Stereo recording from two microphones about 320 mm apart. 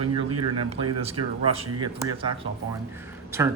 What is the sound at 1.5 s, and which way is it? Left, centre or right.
Speech, centre.